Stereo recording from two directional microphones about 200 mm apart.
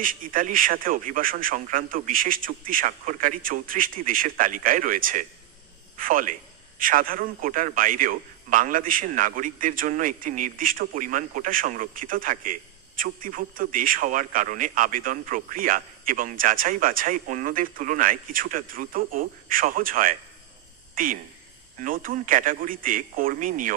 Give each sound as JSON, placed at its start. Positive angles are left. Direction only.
{"t": 0.0, "sound": "a man's voice", "side_deg": -45}